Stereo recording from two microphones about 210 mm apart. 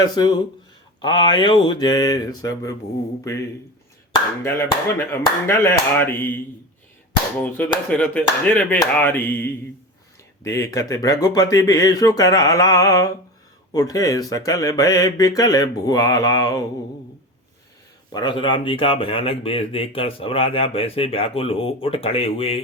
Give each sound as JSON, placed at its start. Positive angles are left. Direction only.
{"t": 0.0, "sound": "speech", "side_deg": 20}
{"t": 4.1, "sound": "speech", "side_deg": 15}
{"t": 7.4, "sound": "speech", "side_deg": 10}
{"t": 18.1, "sound": "speech", "side_deg": 20}